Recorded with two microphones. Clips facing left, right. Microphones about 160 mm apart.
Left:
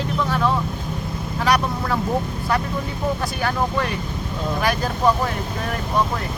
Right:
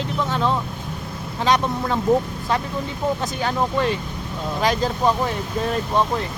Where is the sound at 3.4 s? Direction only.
20° right (ahead or behind).